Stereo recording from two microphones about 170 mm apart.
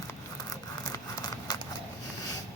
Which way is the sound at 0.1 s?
20° left (ahead or behind).